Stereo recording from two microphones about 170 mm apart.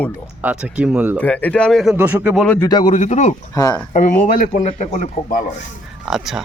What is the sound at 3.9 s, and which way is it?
A man's voice, 45° left (ahead or behind).